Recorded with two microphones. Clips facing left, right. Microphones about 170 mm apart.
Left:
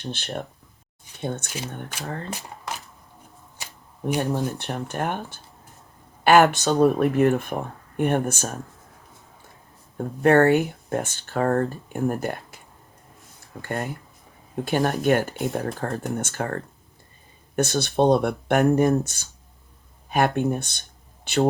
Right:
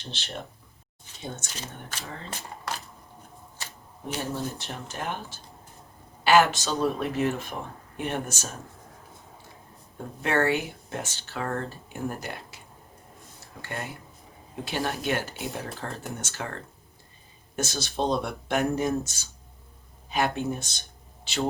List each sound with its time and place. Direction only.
0.0 s speech: 55° left (ahead or behind)
1.5 s speech: 10° left (ahead or behind)
2.0 s speech: 55° left (ahead or behind)
4.2 s speech: 60° left (ahead or behind)
10.2 s speech: 50° left (ahead or behind)
13.6 s speech: 50° left (ahead or behind)
17.6 s speech: 60° left (ahead or behind)